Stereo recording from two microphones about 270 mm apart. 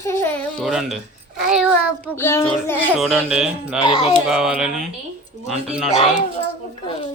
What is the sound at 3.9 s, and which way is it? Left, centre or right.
Speech, centre.